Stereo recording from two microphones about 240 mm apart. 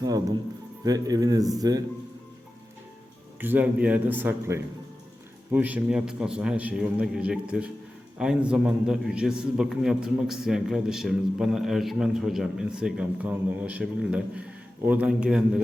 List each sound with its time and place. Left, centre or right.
0.9 s speech: centre
3.4 s a man's voice: centre